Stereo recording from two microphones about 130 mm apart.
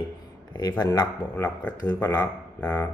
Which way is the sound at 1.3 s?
15° left (ahead or behind).